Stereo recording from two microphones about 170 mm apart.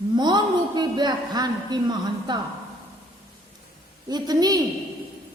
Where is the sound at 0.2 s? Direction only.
25° right (ahead or behind).